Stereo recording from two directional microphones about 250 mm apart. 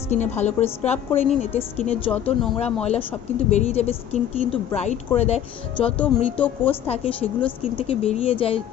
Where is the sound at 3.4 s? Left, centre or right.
Left.